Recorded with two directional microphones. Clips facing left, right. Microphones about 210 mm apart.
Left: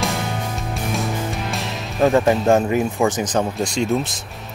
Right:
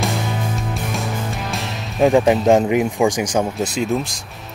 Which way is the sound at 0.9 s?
Centre (ahead or behind).